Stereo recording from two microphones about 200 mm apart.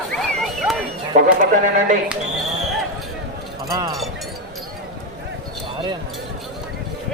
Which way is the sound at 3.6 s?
15° right (ahead or behind).